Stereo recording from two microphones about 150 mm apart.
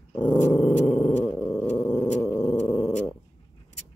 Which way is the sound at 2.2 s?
15° left (ahead or behind).